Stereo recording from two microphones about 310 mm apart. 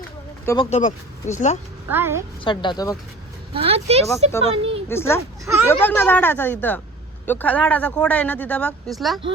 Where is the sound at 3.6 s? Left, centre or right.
Centre.